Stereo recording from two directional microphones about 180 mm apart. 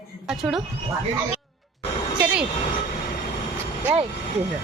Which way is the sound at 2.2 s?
5° right (ahead or behind).